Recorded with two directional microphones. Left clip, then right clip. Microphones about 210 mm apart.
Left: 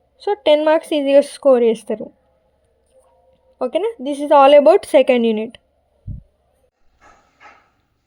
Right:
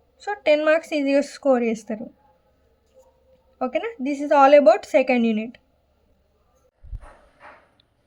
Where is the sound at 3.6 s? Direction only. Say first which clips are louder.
Left 6 dB; 30° left (ahead or behind).